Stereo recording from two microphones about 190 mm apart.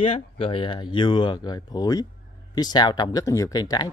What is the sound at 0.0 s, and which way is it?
A man's voice, 30° left (ahead or behind).